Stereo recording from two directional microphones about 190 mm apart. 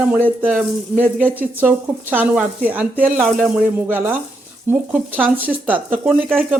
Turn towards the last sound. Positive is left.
turn(degrees=-5)  # may be behind; listen again after turning